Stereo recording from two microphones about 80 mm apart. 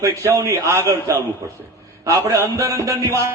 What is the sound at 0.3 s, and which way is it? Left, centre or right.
A man's voice, right.